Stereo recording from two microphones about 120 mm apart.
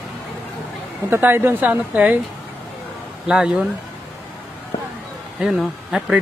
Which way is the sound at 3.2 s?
5° right (ahead or behind).